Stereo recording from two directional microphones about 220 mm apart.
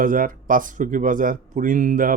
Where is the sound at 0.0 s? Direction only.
40° right (ahead or behind).